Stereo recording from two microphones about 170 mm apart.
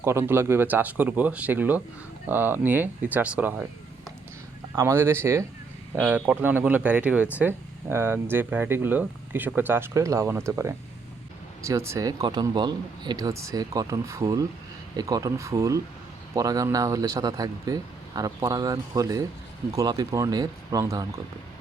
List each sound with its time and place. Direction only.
0.0 s speech: 15° right (ahead or behind)
4.7 s speech: 15° right (ahead or behind)